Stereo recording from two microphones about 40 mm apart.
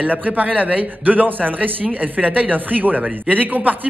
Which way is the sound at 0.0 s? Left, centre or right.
Right.